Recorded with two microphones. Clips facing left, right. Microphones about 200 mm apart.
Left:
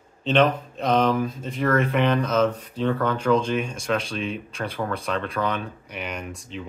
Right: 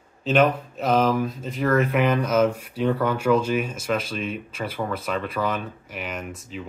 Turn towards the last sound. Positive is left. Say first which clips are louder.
# even
turn(degrees=0)  # may be behind; listen again after turning